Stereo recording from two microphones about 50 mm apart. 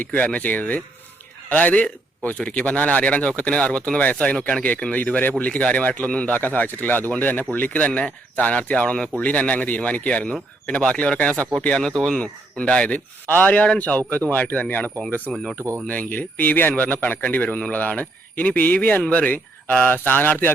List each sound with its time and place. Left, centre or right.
0.0 s a man's voice: left
11.8 s speech: centre
12.1 s a man's voice: left
13.2 s a man's voice: left